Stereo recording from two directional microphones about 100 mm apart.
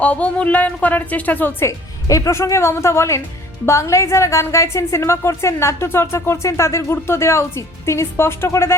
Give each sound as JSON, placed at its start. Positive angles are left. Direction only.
{"t": 0.0, "sound": "a woman's voice", "side_deg": 15}